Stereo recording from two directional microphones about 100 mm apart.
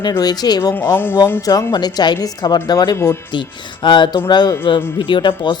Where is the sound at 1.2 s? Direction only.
35° left (ahead or behind).